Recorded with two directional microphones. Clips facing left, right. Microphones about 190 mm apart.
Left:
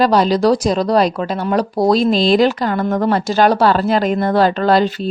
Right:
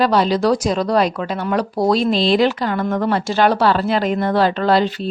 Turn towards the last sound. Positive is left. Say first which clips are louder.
# left 2 dB
turn(degrees=45)  # may be behind; listen again after turning